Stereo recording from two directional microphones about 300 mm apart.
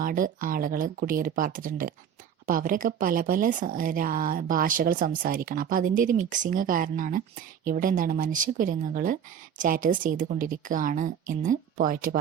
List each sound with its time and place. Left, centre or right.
0.0 s speech: right